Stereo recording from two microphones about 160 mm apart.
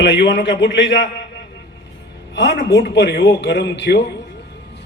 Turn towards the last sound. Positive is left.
turn(degrees=90)